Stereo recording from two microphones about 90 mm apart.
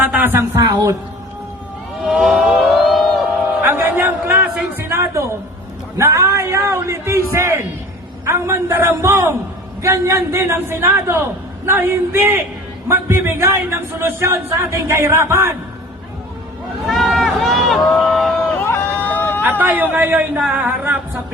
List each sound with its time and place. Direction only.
0.0 s speech: 20° right (ahead or behind)
0.5 s a woman's voice: 40° right (ahead or behind)
2.0 s a sound: centre (ahead or behind)
3.6 s music: 25° right (ahead or behind)
4.8 s a man's voice: 30° right (ahead or behind)
16.8 s run: centre (ahead or behind)
18.5 s a sound: 25° left (ahead or behind)
19.0 s vehicle: 20° left (ahead or behind)
19.4 s a man's voice: 20° right (ahead or behind)
20.4 s a sound: 15° right (ahead or behind)